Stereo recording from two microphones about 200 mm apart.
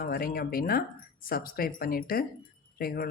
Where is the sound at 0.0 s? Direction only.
50° left (ahead or behind).